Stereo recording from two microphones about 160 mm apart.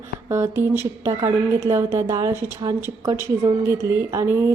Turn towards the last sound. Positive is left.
turn(degrees=-15)  # may be behind; listen again after turning